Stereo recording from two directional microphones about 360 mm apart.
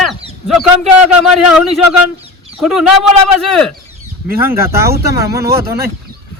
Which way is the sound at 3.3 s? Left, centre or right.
Centre.